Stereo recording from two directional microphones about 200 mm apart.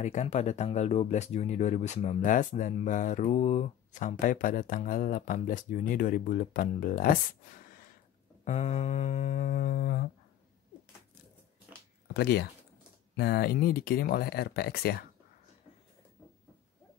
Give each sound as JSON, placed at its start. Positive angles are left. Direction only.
{"t": 0.0, "sound": "speech", "side_deg": 35}
{"t": 8.5, "sound": "speech", "side_deg": 35}
{"t": 12.1, "sound": "speech", "side_deg": 55}